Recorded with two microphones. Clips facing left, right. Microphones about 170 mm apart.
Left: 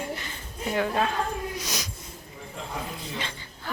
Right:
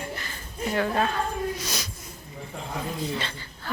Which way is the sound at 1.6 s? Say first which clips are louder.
Right 1 dB; 15° left (ahead or behind).